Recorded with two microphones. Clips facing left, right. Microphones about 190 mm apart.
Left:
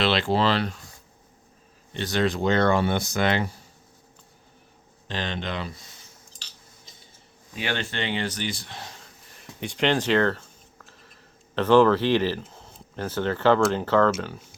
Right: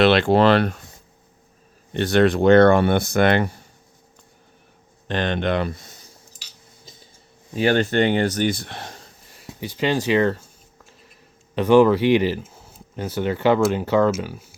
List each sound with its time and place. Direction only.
0.0 s speech: 60° right (ahead or behind)
1.9 s speech: 60° right (ahead or behind)
5.0 s speech: 60° right (ahead or behind)
7.5 s speech: 45° right (ahead or behind); by 9.0 s 60° right (ahead or behind)
9.6 s speech: 5° right (ahead or behind)
11.5 s speech: 15° right (ahead or behind)